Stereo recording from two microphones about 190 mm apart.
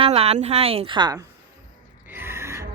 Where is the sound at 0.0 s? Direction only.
30° right (ahead or behind).